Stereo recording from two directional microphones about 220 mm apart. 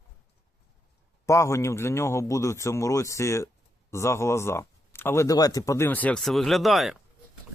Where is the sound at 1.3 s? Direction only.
15° left (ahead or behind).